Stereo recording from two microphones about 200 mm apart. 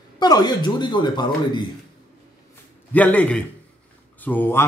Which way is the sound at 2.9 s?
5° left (ahead or behind).